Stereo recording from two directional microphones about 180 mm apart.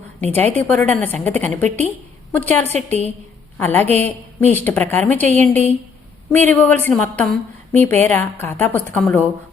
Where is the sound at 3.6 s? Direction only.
10° left (ahead or behind).